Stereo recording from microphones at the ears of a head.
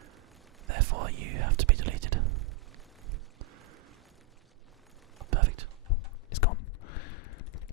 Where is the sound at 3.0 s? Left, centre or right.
Right.